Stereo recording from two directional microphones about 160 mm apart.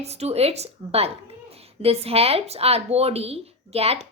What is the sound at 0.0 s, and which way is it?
A woman's voice, 40° right (ahead or behind).